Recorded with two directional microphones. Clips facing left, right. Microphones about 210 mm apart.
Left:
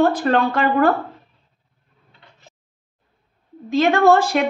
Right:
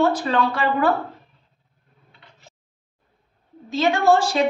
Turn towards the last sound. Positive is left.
turn(degrees=60)  # may be behind; listen again after turning